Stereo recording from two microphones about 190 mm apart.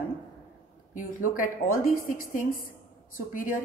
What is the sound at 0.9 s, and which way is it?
Speech, 45° left (ahead or behind).